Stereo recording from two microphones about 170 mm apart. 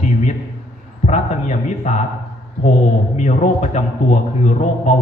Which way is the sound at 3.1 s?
45° left (ahead or behind).